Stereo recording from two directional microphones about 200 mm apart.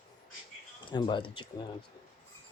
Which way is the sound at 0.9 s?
25° left (ahead or behind).